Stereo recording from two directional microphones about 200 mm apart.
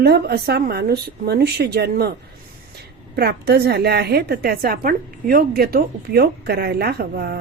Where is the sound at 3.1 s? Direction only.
55° right (ahead or behind).